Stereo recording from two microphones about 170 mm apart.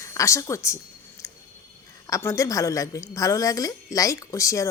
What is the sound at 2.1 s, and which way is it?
A woman's voice, 20° left (ahead or behind).